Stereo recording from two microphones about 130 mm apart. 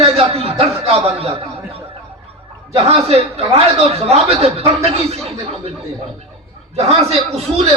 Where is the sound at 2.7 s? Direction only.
50° right (ahead or behind).